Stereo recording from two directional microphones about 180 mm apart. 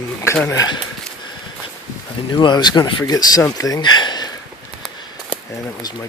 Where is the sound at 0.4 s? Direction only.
20° left (ahead or behind).